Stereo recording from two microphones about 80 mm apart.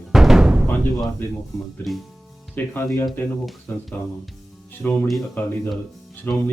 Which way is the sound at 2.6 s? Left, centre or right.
Left.